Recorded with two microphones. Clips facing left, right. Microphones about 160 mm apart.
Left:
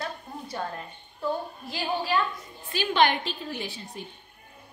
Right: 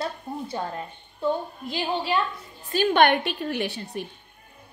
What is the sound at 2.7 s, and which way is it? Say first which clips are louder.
A woman's voice: right 4 dB; 50° right (ahead or behind).